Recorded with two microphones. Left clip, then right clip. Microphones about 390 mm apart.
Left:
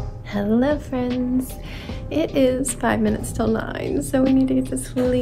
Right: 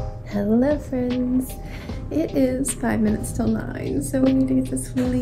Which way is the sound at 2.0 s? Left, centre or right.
Centre.